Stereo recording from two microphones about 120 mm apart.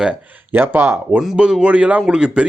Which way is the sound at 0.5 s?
20° right (ahead or behind).